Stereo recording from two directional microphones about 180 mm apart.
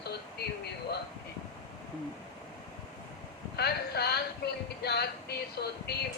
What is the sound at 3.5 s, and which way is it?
Music, 65° left (ahead or behind).